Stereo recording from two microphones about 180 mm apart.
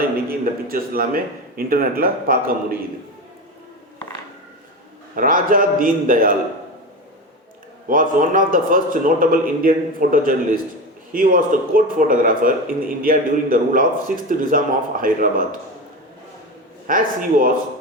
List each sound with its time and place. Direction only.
0.0 s speech: 55° right (ahead or behind)
5.1 s speech: 50° right (ahead or behind)
7.9 s speech: 50° right (ahead or behind)
16.8 s speech: 50° right (ahead or behind)